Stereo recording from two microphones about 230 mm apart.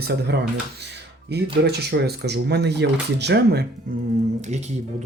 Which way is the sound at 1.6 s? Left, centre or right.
Right.